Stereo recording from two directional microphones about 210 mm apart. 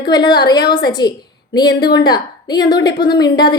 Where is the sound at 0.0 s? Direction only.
20° left (ahead or behind).